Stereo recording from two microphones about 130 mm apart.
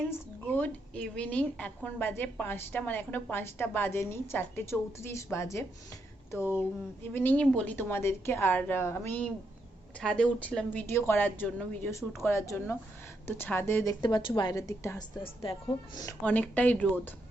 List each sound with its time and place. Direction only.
0.1 s a woman's voice: 15° left (ahead or behind)
7.1 s a woman's voice: 15° left (ahead or behind)
14.0 s a woman's voice: 40° left (ahead or behind)
14.5 s a woman's voice: 25° left (ahead or behind)
16.2 s a woman's voice: 10° left (ahead or behind)